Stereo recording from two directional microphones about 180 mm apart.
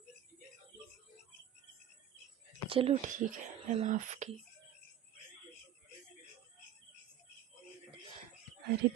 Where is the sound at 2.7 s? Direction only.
30° right (ahead or behind).